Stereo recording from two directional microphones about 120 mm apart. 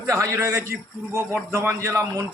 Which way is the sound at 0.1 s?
25° right (ahead or behind).